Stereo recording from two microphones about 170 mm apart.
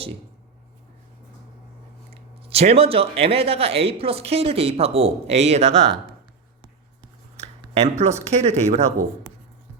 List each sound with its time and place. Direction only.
2.5 s speech: 35° right (ahead or behind)
7.8 s speech: 40° right (ahead or behind)